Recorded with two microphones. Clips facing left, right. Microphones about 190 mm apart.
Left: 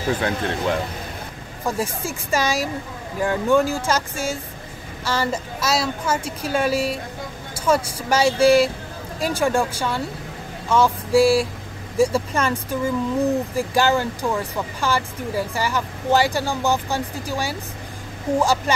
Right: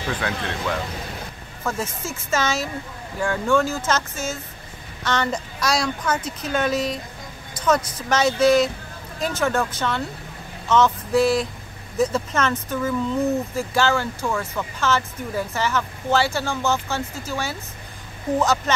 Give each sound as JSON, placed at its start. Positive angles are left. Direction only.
{"t": 0.0, "sound": "speech", "side_deg": 40}
{"t": 1.6, "sound": "speech", "side_deg": 15}